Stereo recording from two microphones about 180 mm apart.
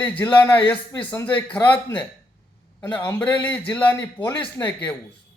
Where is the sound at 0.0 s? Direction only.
10° left (ahead or behind).